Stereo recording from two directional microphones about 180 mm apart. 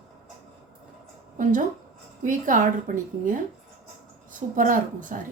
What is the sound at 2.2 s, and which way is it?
A woman's voice, 50° right (ahead or behind).